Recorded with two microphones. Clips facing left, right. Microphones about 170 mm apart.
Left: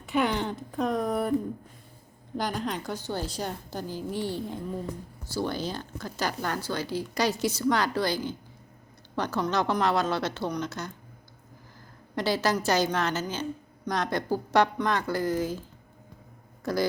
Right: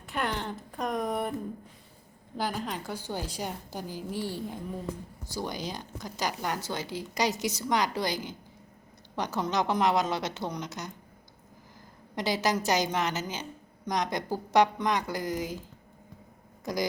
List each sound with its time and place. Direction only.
0.0 s speech: centre (ahead or behind)
2.4 s a woman's voice: 5° right (ahead or behind)
12.1 s a woman's voice: 15° right (ahead or behind)
16.7 s a woman's voice: 15° right (ahead or behind)